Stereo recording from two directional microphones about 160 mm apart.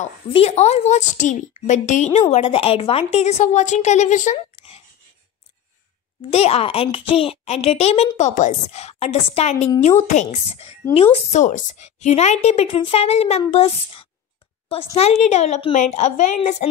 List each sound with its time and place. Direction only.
0.3 s speech: 40° left (ahead or behind)
2.3 s a woman's voice: 35° left (ahead or behind)
6.3 s a woman's voice: 40° left (ahead or behind)